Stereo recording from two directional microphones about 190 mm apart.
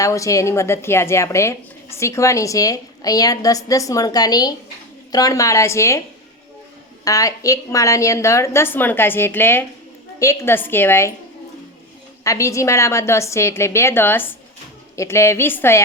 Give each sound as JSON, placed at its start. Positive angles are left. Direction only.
{"t": 0.0, "sound": "a woman's voice", "side_deg": 15}
{"t": 7.0, "sound": "a woman's voice", "side_deg": 20}
{"t": 12.2, "sound": "a woman's voice", "side_deg": 15}